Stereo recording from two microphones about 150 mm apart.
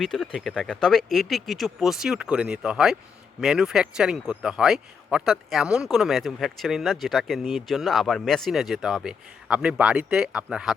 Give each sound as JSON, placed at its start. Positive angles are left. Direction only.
{"t": 0.0, "sound": "speech", "side_deg": 5}